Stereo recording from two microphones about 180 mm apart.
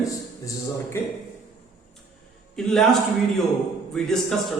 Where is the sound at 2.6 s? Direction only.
Centre (ahead or behind).